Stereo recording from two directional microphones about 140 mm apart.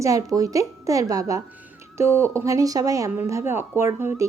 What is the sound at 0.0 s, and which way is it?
Speech, 25° right (ahead or behind).